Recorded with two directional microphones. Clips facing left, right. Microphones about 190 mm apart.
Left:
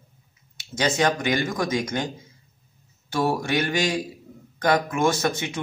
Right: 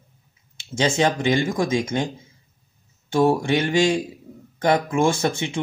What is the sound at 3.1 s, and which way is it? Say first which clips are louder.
Speech: right 5 dB; 25° right (ahead or behind).